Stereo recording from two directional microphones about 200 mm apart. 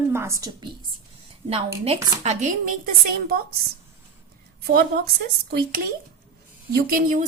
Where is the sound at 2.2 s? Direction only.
40° right (ahead or behind).